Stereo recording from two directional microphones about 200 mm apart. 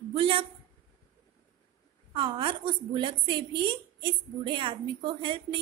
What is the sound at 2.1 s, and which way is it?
A woman's voice, 25° right (ahead or behind).